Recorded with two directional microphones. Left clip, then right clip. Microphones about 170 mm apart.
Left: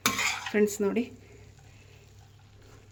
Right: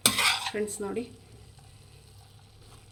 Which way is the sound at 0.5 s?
55° left (ahead or behind).